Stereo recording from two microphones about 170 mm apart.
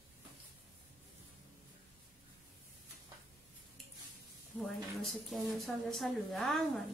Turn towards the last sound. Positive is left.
turn(degrees=0)  # may be behind; listen again after turning